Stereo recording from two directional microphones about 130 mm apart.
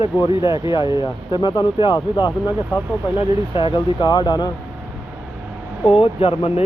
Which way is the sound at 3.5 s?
40° left (ahead or behind).